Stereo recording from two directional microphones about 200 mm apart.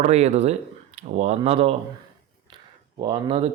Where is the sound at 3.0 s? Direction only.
25° right (ahead or behind).